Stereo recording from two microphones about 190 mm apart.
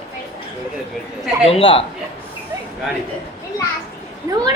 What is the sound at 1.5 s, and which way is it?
Speech, 30° left (ahead or behind).